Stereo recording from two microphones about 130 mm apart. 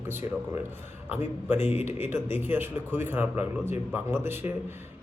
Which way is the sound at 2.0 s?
15° right (ahead or behind).